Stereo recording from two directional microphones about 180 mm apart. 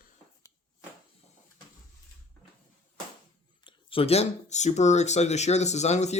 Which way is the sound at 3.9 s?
30° left (ahead or behind).